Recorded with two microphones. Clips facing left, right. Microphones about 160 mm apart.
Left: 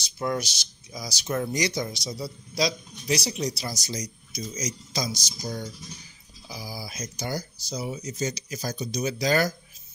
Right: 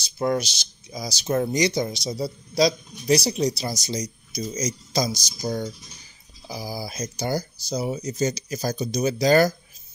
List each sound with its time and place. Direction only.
0.0 s speech: 30° right (ahead or behind)
4.3 s speech: 40° right (ahead or behind)